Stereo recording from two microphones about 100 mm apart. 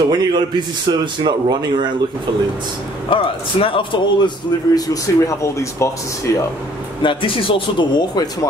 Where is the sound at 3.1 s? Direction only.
60° left (ahead or behind).